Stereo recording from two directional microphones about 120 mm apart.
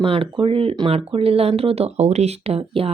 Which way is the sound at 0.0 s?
50° right (ahead or behind).